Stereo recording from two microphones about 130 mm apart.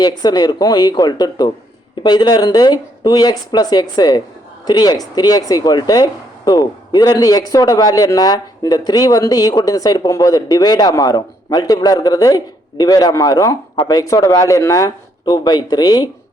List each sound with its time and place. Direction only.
0.2 s speech: 30° left (ahead or behind)